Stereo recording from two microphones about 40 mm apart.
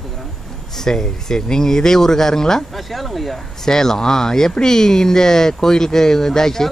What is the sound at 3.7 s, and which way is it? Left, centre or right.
Speech, centre.